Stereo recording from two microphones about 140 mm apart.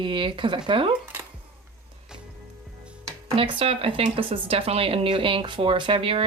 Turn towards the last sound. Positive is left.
turn(degrees=-40)  # may be behind; listen again after turning